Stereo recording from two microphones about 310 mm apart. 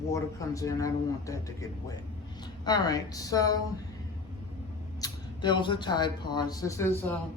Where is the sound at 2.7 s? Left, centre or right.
Centre.